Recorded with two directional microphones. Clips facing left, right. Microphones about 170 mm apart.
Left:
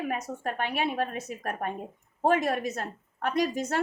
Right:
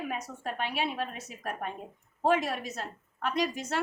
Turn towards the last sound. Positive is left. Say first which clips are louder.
# left 3 dB
turn(degrees=45)  # may be behind; listen again after turning